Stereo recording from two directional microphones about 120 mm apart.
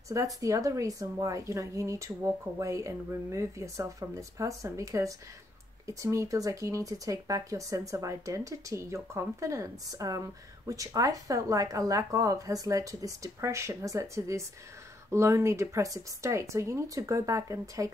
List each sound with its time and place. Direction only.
0.1 s speech: 25° right (ahead or behind)